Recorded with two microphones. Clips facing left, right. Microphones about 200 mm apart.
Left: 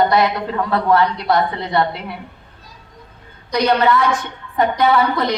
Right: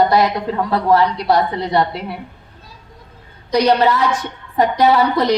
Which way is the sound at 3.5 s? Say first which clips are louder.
Right 2 dB; 35° right (ahead or behind).